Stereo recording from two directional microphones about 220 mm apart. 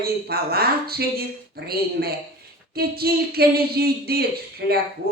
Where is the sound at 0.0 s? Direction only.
45° right (ahead or behind).